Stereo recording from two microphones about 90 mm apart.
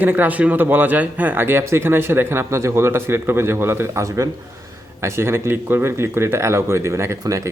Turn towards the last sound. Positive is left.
turn(degrees=-35)  # may be behind; listen again after turning